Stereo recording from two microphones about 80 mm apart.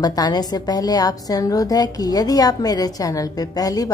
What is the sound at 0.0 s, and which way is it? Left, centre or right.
A woman's voice, left.